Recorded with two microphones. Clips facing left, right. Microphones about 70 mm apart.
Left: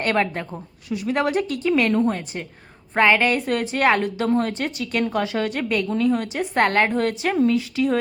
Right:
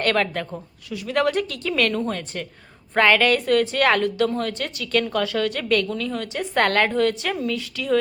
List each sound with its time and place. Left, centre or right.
0.0 s speech: left